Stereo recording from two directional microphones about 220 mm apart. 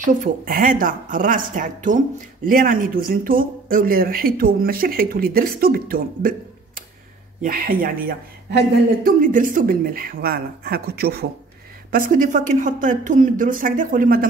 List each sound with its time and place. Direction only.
0.0 s speech: 40° right (ahead or behind)
7.4 s speech: 40° right (ahead or behind)